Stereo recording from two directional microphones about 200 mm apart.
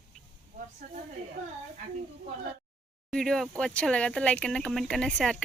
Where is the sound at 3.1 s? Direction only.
5° left (ahead or behind).